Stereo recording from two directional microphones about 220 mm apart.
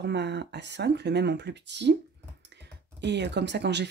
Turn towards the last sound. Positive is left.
turn(degrees=-50)  # may be behind; listen again after turning